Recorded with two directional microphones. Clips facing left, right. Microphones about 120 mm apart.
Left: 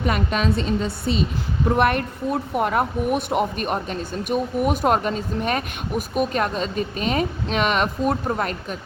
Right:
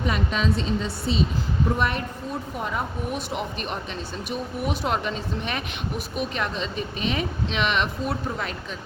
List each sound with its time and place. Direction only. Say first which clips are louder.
0.0 s speech: left 3 dB; 55° left (ahead or behind)